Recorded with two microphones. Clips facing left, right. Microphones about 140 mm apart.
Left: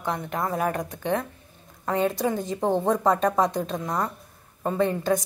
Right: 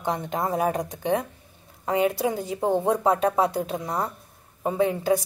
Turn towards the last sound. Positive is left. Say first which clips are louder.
# right 1 dB
turn(degrees=-10)  # may be behind; listen again after turning